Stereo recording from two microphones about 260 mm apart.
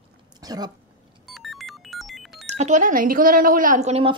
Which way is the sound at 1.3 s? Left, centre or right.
Centre.